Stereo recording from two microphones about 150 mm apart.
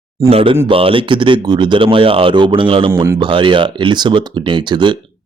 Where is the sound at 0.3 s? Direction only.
40° right (ahead or behind).